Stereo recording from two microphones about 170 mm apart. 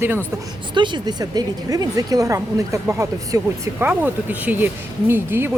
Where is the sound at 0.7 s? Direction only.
25° right (ahead or behind).